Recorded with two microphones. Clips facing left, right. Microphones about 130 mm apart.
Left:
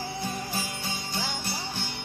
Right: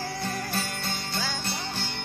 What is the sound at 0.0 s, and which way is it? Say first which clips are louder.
Music: right 1 dB; 15° left (ahead or behind).